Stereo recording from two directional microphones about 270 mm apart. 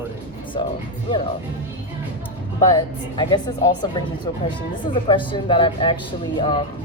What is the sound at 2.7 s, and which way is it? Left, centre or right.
Speech, centre.